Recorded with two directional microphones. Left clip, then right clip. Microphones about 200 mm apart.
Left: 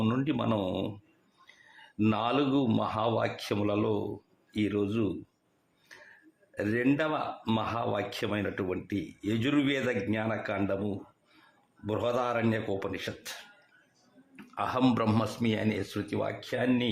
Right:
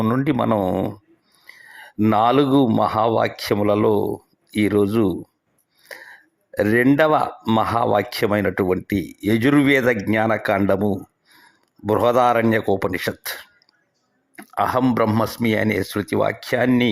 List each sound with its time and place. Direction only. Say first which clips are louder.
0.0 s speech: right 10 dB; 30° right (ahead or behind)
2.0 s speech: right 12 dB; 35° right (ahead or behind)
6.5 s speech: right 12 dB; 35° right (ahead or behind)
11.9 s speech: right 14 dB; 40° right (ahead or behind)
14.3 s a sound: right 12 dB; 30° right (ahead or behind)
14.9 s speech: right 10 dB; 25° right (ahead or behind)